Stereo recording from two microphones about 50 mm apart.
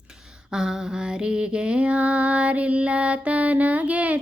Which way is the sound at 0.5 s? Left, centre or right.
Centre.